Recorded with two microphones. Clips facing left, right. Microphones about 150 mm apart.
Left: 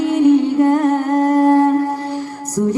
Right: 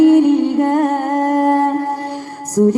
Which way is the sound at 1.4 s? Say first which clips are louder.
Left 3 dB; 45° right (ahead or behind).